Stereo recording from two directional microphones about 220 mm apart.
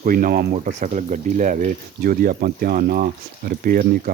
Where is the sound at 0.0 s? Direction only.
40° right (ahead or behind).